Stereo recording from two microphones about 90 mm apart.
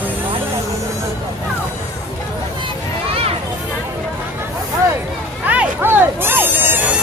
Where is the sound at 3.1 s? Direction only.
90° right.